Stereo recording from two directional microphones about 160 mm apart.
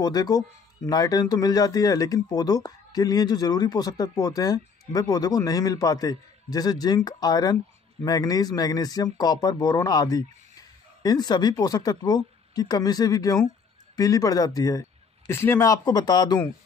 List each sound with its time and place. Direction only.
0.0 s speech: 25° left (ahead or behind)